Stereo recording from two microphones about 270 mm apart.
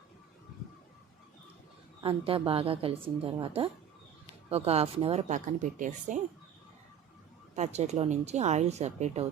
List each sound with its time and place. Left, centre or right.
2.0 s speech: centre
7.5 s speech: right